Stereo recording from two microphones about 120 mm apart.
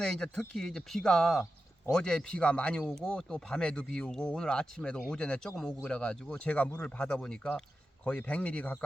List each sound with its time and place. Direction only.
0.0 s speech: 5° left (ahead or behind)